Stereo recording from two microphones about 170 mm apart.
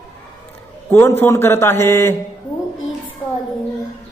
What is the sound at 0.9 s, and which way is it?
A man's voice, 15° left (ahead or behind).